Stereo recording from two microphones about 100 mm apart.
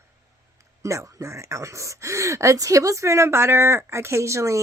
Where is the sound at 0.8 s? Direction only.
30° right (ahead or behind).